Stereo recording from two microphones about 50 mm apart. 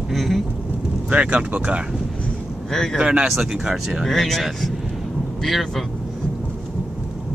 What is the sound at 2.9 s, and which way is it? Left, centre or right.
Speech, centre.